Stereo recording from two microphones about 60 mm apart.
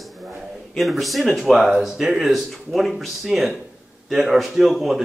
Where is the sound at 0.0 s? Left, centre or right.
Centre.